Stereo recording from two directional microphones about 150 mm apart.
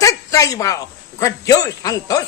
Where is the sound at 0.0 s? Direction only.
20° left (ahead or behind).